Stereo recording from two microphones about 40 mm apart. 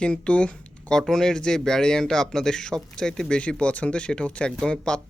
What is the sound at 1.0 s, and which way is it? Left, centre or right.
Speech, centre.